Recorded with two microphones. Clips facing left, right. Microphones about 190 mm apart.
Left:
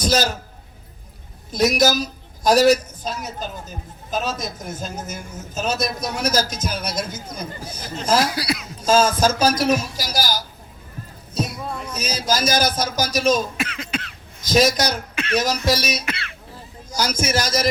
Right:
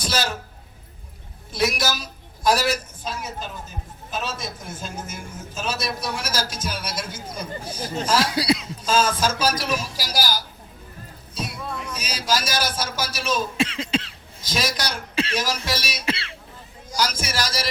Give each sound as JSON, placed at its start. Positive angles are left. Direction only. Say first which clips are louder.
{"t": 0.0, "sound": "a sound", "louder": "left 6 dB", "side_deg": 40}
{"t": 1.5, "sound": "a woman's voice", "louder": "left 6 dB", "side_deg": 40}
{"t": 8.3, "sound": "speech", "louder": "right 3 dB", "side_deg": -25}
{"t": 8.9, "sound": "a woman's voice", "louder": "left 5 dB", "side_deg": 45}
{"t": 11.3, "sound": "a sound", "louder": "left 5 dB", "side_deg": 45}
{"t": 12.3, "sound": "a man's voice", "louder": "left 4 dB", "side_deg": 45}
{"t": 13.6, "sound": "cough", "louder": "right 4 dB", "side_deg": -30}
{"t": 14.4, "sound": "a woman's voice", "louder": "left 9 dB", "side_deg": 45}
{"t": 16.0, "sound": "cough", "louder": "right 3 dB", "side_deg": -30}
{"t": 16.9, "sound": "a woman's voice", "louder": "left 4 dB", "side_deg": 45}